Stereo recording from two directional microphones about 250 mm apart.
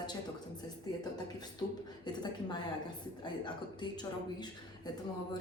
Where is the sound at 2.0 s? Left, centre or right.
Centre.